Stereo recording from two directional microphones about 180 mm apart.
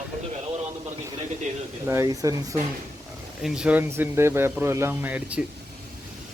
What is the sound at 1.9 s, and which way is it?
Speech, 15° right (ahead or behind).